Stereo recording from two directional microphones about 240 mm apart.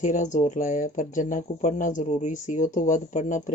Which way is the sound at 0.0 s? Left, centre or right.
Left.